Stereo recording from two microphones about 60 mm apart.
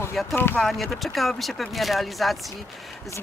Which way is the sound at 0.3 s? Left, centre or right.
Left.